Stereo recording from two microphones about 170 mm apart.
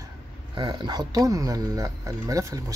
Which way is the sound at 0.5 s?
25° right (ahead or behind).